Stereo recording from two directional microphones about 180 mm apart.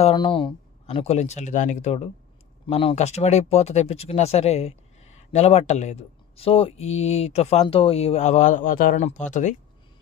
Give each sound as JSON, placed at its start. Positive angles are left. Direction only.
{"t": 0.0, "sound": "speech", "side_deg": 25}